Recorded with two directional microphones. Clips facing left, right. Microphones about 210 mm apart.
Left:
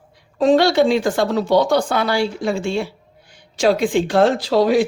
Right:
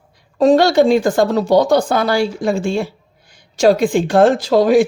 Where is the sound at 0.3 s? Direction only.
40° right (ahead or behind).